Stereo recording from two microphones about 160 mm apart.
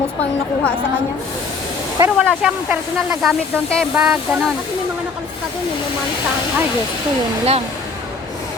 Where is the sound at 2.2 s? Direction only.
Centre (ahead or behind).